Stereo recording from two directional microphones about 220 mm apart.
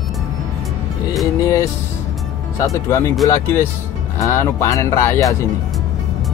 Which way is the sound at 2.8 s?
15° left (ahead or behind).